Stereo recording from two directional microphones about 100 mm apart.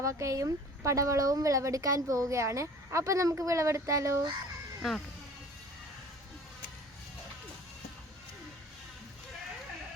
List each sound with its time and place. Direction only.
0.0 s speech: 30° right (ahead or behind)
4.8 s speech: centre (ahead or behind)